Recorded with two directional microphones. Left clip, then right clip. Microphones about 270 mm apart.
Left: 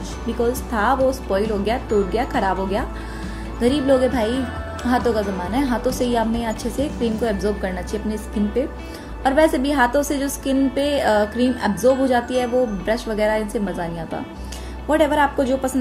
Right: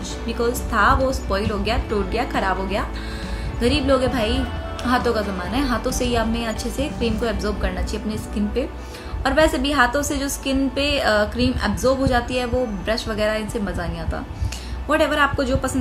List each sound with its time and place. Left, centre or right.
0.7 s a woman's voice: centre
14.9 s a woman's voice: centre